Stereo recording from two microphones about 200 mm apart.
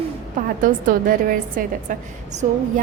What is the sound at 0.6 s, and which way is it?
A woman's voice, 45° right (ahead or behind).